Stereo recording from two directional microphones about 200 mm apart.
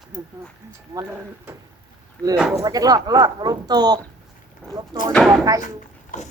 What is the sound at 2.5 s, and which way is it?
Speech, 20° right (ahead or behind).